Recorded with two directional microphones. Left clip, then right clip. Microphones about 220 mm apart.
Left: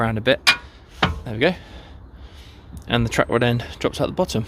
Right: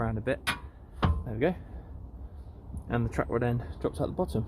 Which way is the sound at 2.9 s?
50° left (ahead or behind).